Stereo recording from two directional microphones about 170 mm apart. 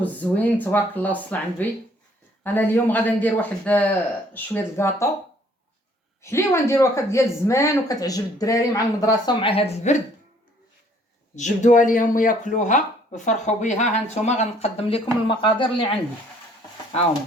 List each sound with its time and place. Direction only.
0.0 s speech: 10° left (ahead or behind)
6.2 s a woman's voice: 15° left (ahead or behind); by 10.0 s 40° left (ahead or behind)
11.3 s speech: 45° left (ahead or behind); by 15.9 s 30° left (ahead or behind)